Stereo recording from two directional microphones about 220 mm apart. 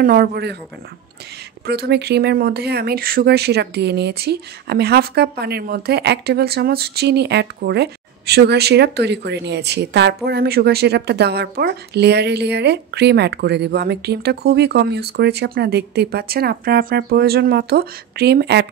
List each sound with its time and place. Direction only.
0.0 s speech: 45° right (ahead or behind)
1.7 s speech: 45° right (ahead or behind)